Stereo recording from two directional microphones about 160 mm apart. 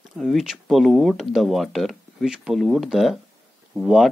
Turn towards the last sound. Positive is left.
turn(degrees=-5)  # may be behind; listen again after turning